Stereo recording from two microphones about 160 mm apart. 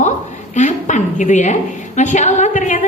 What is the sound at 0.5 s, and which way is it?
A woman's voice, 50° left (ahead or behind).